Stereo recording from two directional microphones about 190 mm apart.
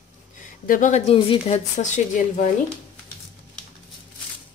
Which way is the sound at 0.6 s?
45° left (ahead or behind).